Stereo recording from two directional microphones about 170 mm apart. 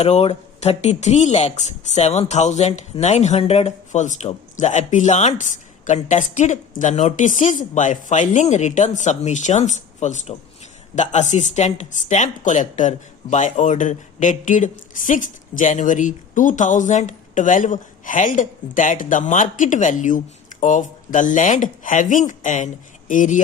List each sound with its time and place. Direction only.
0.0 s speech: 35° left (ahead or behind)